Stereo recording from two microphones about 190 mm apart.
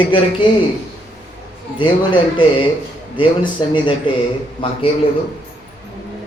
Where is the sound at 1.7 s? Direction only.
25° left (ahead or behind).